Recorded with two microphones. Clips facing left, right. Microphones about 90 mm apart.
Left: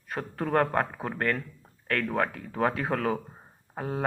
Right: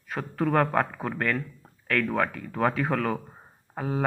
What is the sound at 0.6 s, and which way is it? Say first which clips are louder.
Speech: right 2 dB; 10° left (ahead or behind).